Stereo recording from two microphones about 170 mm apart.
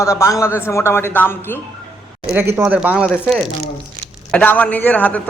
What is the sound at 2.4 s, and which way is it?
Speech, 15° right (ahead or behind).